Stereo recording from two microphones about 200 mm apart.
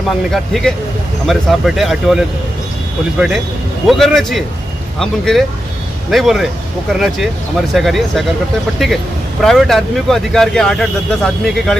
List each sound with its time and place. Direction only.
0.3 s speech: centre (ahead or behind)
3.8 s speech: centre (ahead or behind)